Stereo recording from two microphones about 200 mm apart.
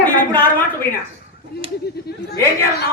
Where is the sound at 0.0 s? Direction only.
10° left (ahead or behind).